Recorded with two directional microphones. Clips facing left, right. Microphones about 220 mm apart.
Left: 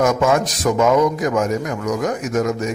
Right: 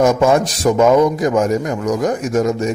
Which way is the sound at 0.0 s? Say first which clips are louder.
Right 3 dB; 30° right (ahead or behind).